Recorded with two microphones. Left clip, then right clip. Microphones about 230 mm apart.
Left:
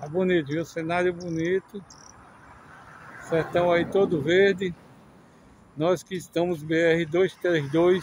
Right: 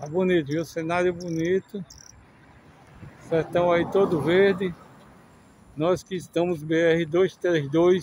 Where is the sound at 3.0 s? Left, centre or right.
Left.